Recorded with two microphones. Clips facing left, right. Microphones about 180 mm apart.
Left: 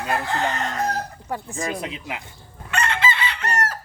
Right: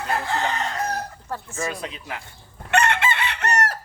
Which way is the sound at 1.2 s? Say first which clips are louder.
Left 1 dB; 15° left (ahead or behind).